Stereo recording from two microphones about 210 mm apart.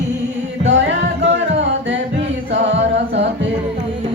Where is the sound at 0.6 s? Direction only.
60° right (ahead or behind).